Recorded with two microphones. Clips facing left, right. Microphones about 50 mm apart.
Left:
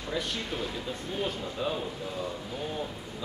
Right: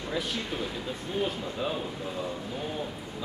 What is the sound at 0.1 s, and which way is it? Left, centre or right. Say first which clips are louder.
Speech: even; centre.